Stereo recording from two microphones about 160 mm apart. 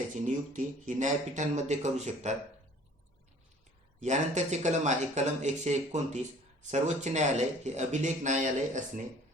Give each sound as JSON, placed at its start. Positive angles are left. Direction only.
{"t": 0.1, "sound": "speech", "side_deg": -50}
{"t": 4.0, "sound": "speech", "side_deg": -45}